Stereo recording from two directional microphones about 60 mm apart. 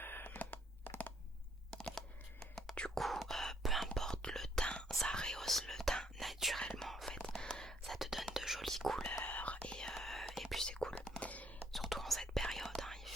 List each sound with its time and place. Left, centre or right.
0.0 s a sound: left
1.7 s whispering: centre
7.9 s whispering: centre
9.2 s whispering: left; by 10.7 s centre
10.7 s whispering: centre
11.2 s a sound: left
11.7 s whispering: centre